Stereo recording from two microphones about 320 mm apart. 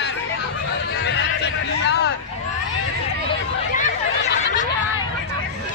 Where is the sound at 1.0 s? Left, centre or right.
Left.